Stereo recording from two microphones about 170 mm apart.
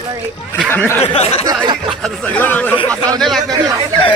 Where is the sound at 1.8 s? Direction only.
5° left (ahead or behind).